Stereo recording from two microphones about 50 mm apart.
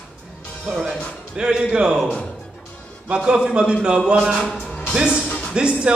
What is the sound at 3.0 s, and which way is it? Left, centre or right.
A man's voice, right.